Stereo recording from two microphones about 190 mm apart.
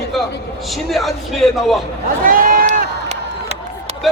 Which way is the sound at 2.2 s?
50° right (ahead or behind).